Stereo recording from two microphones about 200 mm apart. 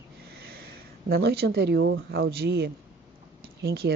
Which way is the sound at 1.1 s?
55° right (ahead or behind).